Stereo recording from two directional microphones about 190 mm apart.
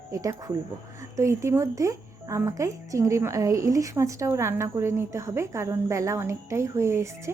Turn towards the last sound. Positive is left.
turn(degrees=-15)  # may be behind; listen again after turning